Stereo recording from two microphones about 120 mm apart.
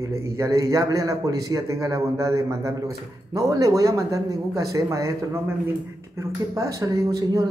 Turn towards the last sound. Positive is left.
turn(degrees=-30)  # may be behind; listen again after turning